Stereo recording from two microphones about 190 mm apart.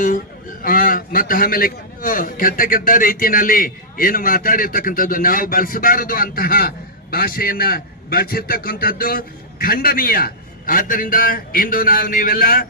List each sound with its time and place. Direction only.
0.6 s a man's voice: 45° left (ahead or behind)